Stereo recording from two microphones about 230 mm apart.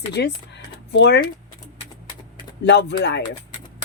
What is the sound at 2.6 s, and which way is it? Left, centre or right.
Speech, left.